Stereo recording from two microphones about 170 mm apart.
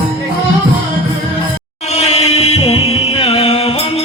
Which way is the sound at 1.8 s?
40° left (ahead or behind).